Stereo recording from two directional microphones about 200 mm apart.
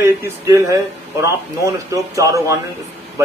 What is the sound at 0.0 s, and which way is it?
A man's voice, 15° right (ahead or behind).